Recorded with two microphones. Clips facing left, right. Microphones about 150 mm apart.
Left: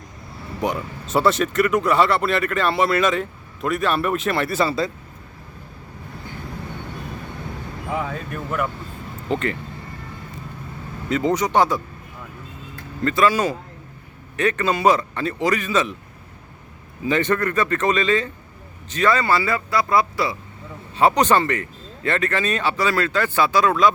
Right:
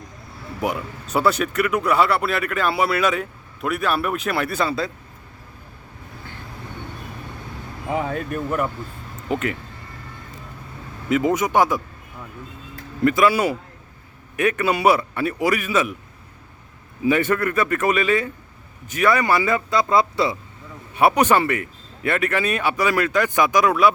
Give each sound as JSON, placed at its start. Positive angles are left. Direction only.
{"t": 0.6, "sound": "speech", "side_deg": -5}
{"t": 9.3, "sound": "speech", "side_deg": -5}
{"t": 11.1, "sound": "speech", "side_deg": -10}
{"t": 13.0, "sound": "speech", "side_deg": -10}
{"t": 17.1, "sound": "speech", "side_deg": -10}
{"t": 20.9, "sound": "speech", "side_deg": -10}